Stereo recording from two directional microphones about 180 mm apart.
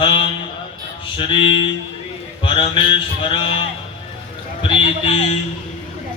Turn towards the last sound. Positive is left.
turn(degrees=35)  # may be behind; listen again after turning